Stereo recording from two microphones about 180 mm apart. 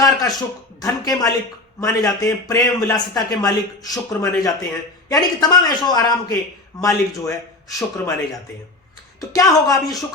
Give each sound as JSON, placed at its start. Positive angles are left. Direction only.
{"t": 0.0, "sound": "a sound", "side_deg": 20}
{"t": 0.8, "sound": "a man's voice", "side_deg": 20}
{"t": 9.3, "sound": "a man's voice", "side_deg": 20}